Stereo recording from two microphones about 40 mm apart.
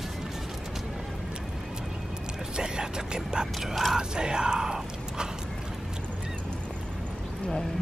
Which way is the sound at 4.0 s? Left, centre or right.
Centre.